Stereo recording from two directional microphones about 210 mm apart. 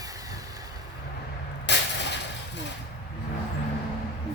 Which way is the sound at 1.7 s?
55° left (ahead or behind).